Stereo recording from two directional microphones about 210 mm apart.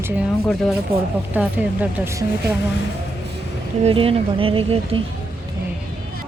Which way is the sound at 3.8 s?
25° right (ahead or behind).